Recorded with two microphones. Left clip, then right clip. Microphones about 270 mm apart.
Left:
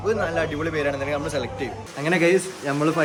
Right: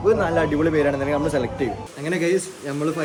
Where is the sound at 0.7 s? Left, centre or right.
Right.